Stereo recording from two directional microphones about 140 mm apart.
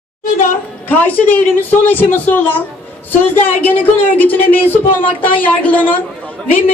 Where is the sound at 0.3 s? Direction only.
65° left (ahead or behind).